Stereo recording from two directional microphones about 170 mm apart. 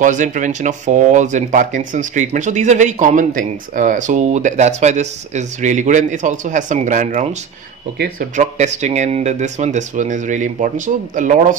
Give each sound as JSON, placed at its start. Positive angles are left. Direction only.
{"t": 0.0, "sound": "speech", "side_deg": -45}
{"t": 8.4, "sound": "speech", "side_deg": -45}